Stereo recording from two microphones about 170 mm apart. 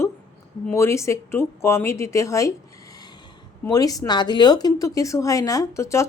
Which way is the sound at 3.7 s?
20° left (ahead or behind).